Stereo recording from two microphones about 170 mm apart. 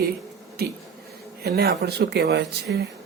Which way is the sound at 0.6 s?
65° right (ahead or behind).